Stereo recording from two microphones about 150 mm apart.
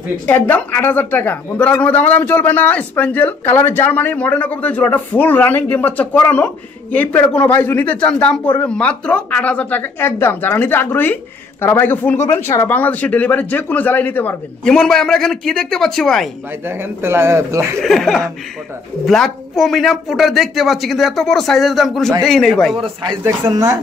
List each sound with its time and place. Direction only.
0.3 s a man's voice: 10° left (ahead or behind)
16.6 s speech: 15° right (ahead or behind)
17.7 s a man's voice: centre (ahead or behind)
23.2 s speech: 25° right (ahead or behind)